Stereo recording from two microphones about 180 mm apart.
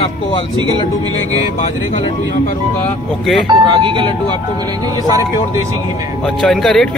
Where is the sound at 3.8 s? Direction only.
25° right (ahead or behind).